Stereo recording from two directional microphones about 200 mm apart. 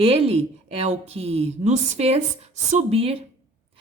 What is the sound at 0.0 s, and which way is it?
A woman's voice, 30° right (ahead or behind).